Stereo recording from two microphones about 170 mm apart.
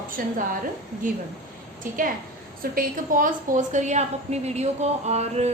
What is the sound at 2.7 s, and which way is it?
A woman's voice, 50° right (ahead or behind).